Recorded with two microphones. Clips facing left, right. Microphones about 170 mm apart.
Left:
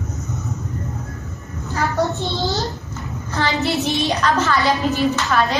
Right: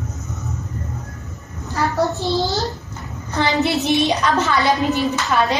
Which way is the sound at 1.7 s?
Centre (ahead or behind).